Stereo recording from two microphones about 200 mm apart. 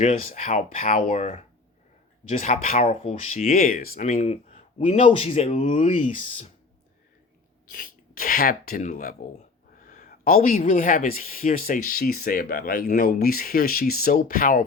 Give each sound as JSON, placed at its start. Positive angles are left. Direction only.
{"t": 0.0, "sound": "speech", "side_deg": 40}
{"t": 7.7, "sound": "speech", "side_deg": 45}